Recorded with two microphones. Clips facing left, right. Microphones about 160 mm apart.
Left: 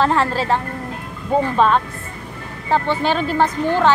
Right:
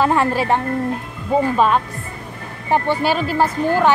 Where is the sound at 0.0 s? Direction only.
15° right (ahead or behind).